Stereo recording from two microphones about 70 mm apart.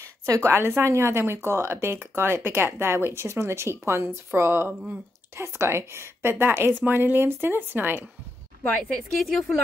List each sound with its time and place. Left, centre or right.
0.3 s speech: right
5.3 s speech: right
8.9 s speech: centre